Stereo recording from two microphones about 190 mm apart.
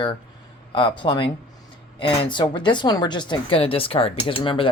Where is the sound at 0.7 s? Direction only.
25° left (ahead or behind).